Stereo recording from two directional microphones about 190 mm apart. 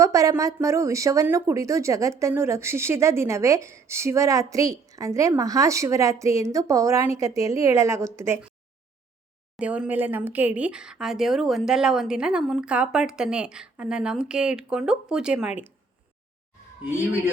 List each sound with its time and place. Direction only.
0.0 s speech: 15° right (ahead or behind)
9.6 s speech: 5° right (ahead or behind)